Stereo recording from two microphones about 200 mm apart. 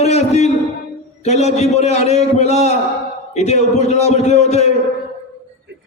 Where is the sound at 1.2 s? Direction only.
35° left (ahead or behind).